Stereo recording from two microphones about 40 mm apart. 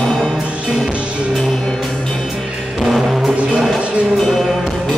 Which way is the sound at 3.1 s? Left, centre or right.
Centre.